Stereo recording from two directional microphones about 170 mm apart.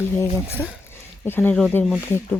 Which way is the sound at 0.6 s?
15° left (ahead or behind).